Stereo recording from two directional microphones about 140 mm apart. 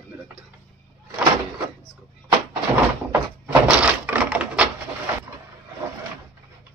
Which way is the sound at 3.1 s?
10° right (ahead or behind).